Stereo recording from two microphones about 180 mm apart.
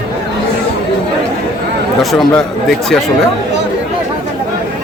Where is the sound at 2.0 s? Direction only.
Centre (ahead or behind).